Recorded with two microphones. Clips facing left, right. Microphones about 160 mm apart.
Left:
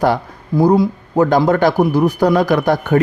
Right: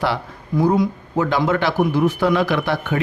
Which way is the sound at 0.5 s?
35° left (ahead or behind).